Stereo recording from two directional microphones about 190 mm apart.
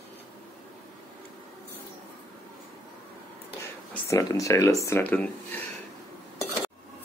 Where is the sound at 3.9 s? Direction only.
15° left (ahead or behind).